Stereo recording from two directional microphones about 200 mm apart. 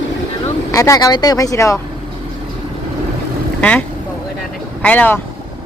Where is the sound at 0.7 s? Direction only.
15° left (ahead or behind).